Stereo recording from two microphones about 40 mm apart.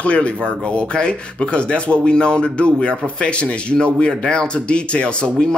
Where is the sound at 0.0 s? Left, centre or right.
Left.